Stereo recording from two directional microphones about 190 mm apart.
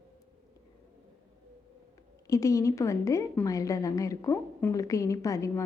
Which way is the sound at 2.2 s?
15° left (ahead or behind).